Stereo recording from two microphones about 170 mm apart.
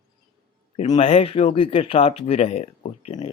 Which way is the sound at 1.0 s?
35° left (ahead or behind).